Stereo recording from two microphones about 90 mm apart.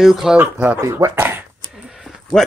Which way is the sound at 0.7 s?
35° right (ahead or behind).